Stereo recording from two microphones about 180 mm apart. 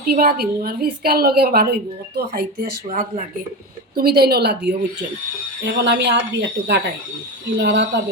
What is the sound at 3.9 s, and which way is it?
Speech, 60° right (ahead or behind).